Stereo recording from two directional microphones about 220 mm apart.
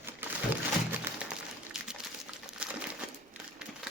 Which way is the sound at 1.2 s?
Centre (ahead or behind).